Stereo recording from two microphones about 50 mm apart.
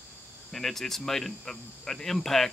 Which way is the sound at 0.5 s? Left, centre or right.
Centre.